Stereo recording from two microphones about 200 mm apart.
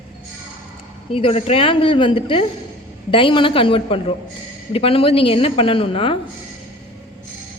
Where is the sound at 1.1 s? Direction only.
30° left (ahead or behind).